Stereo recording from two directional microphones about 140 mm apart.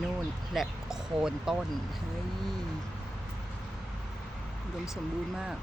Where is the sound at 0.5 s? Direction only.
Centre (ahead or behind).